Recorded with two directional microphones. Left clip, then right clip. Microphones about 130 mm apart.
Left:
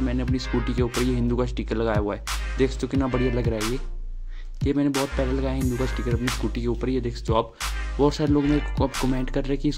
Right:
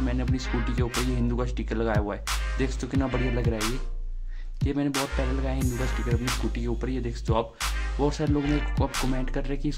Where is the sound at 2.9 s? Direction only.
Centre (ahead or behind).